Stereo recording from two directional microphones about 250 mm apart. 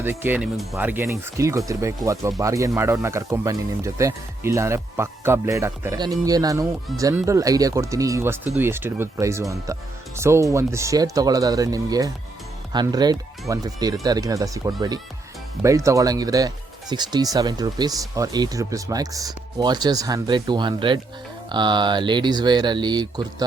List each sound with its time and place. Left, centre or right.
0.0 s speech: centre